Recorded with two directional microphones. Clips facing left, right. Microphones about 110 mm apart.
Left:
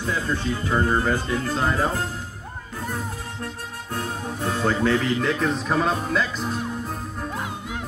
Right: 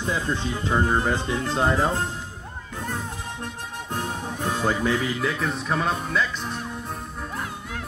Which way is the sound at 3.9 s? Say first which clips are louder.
Left 1 dB; 20° right (ahead or behind).